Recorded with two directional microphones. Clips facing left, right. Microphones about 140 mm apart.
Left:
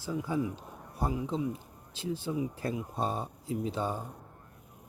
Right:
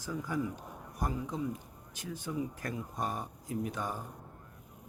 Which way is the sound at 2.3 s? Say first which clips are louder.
Left 2 dB; 20° left (ahead or behind).